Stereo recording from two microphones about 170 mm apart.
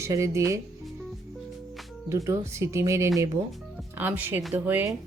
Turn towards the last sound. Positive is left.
turn(degrees=-10)  # may be behind; listen again after turning